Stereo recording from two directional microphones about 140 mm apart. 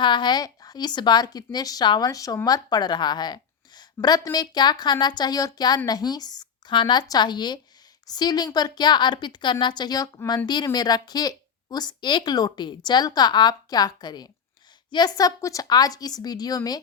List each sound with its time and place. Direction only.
0.0 s a woman's voice: 35° left (ahead or behind)